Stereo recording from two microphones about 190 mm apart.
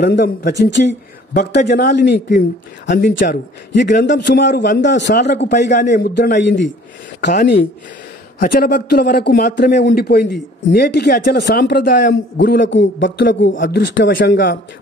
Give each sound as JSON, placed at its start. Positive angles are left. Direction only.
{"t": 0.0, "sound": "a man's voice", "side_deg": 60}
{"t": 3.8, "sound": "a man's voice", "side_deg": 65}
{"t": 8.4, "sound": "a man's voice", "side_deg": 50}
{"t": 9.8, "sound": "a man's voice", "side_deg": 60}
{"t": 13.6, "sound": "a man's voice", "side_deg": 50}